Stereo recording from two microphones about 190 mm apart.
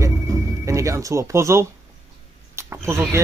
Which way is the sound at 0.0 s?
15° right (ahead or behind).